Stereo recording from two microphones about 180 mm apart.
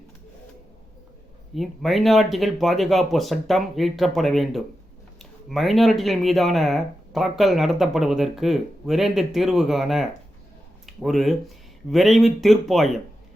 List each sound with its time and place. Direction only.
1.5 s speech: centre (ahead or behind)